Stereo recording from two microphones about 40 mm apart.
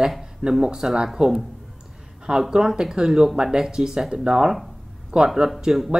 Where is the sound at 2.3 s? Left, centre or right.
Right.